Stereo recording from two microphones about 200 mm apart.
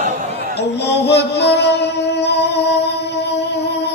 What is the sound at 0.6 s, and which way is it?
Music, 55° left (ahead or behind).